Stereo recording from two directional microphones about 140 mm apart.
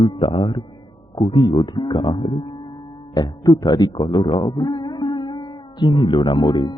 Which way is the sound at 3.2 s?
30° left (ahead or behind).